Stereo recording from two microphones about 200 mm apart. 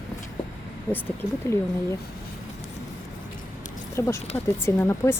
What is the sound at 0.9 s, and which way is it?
Speech, 10° left (ahead or behind).